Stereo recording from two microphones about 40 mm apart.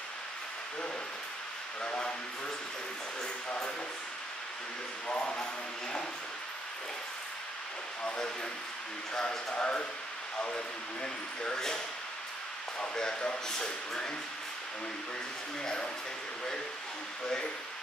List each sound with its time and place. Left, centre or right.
1.8 s speech: left
3.4 s a sound: left
5.0 s speech: left
9.5 s speech: left
12.9 s speech: centre